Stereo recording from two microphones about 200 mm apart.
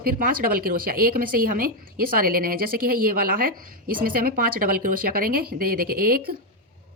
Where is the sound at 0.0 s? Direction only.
45° right (ahead or behind).